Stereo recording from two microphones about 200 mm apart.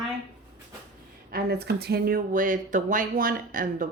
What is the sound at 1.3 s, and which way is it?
Speech, 50° right (ahead or behind).